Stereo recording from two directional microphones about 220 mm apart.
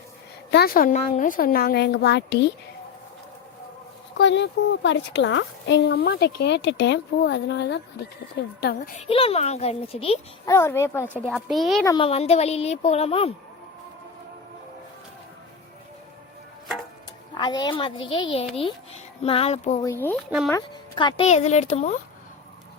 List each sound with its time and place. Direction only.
0.5 s a woman's voice: 45° left (ahead or behind)
4.2 s a woman's voice: 55° left (ahead or behind)
9.0 s speech: 25° left (ahead or behind)
10.4 s speech: 10° left (ahead or behind)
11.3 s speech: centre (ahead or behind)
11.9 s speech: 25° left (ahead or behind)
17.3 s speech: 20° left (ahead or behind)
19.8 s speech: 10° left (ahead or behind); by 21.9 s 30° left (ahead or behind)